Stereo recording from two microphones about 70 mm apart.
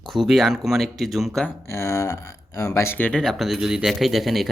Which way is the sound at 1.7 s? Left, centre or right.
Left.